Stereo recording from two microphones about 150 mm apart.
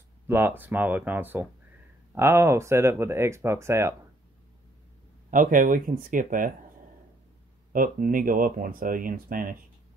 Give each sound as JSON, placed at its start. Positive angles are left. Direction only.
{"t": 0.3, "sound": "speech", "side_deg": -15}
{"t": 5.3, "sound": "speech", "side_deg": -65}
{"t": 7.7, "sound": "speech", "side_deg": -65}